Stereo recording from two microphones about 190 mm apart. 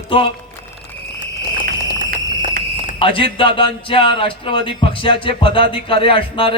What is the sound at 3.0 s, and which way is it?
Speech, 25° left (ahead or behind).